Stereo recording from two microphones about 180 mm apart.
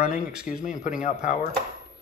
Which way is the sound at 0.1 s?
5° right (ahead or behind).